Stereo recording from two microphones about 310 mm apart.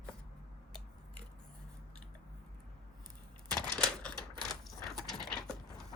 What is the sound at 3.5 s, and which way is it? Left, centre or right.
Typewriter, centre.